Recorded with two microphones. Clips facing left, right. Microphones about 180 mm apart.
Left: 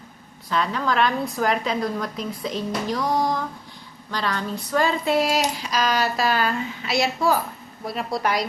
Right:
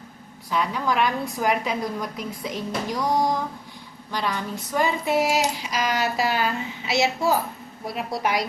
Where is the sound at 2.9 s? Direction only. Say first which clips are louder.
Right 1 dB; 20° right (ahead or behind).